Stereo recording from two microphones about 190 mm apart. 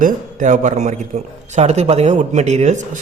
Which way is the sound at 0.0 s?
45° right (ahead or behind).